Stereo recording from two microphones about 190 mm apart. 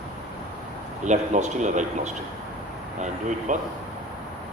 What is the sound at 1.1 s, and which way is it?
Speech, 40° right (ahead or behind).